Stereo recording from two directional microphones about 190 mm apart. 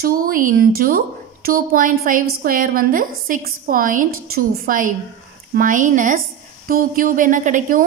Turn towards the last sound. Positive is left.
turn(degrees=-40)  # may be behind; listen again after turning